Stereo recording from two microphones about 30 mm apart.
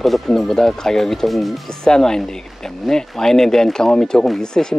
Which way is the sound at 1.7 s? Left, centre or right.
Left.